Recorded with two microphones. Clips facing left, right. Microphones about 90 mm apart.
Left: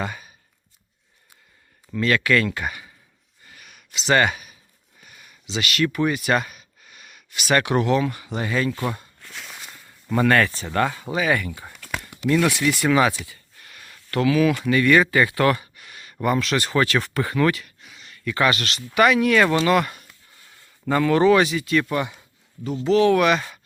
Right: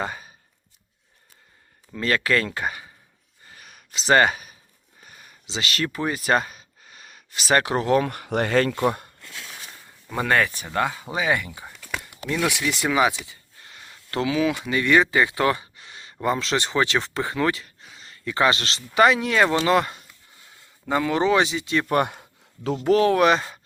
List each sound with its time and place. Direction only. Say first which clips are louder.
0.0 s a sound: even; 30° right (ahead or behind)
2.0 s speech: left 2 dB; 35° right (ahead or behind)
3.4 s a sound: right 1 dB; 35° right (ahead or behind)
7.9 s speech: right 2 dB; 55° right (ahead or behind)
10.1 s speech: left 3 dB; 15° right (ahead or behind)
20.8 s speech: left 4 dB; 15° right (ahead or behind)
21.8 s speech: right 3 dB; 55° right (ahead or behind)
22.8 s speech: left 1 dB; 40° right (ahead or behind)